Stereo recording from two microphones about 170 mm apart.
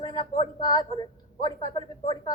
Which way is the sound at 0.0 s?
25° left (ahead or behind).